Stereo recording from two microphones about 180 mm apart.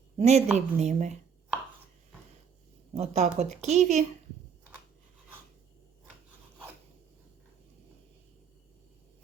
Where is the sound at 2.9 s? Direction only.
35° right (ahead or behind).